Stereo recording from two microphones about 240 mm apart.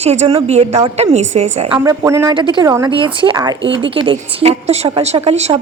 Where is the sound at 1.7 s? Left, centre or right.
Centre.